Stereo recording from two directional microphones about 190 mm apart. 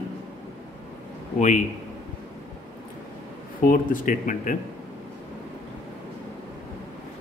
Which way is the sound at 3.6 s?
45° left (ahead or behind).